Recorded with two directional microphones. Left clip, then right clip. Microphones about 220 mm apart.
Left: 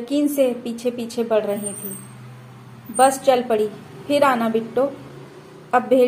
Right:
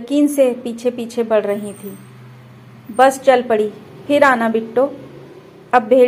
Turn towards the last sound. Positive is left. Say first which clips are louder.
# right 5 dB
turn(degrees=-20)  # may be behind; listen again after turning